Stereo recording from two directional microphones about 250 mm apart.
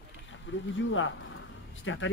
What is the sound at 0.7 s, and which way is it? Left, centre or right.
Speech, left.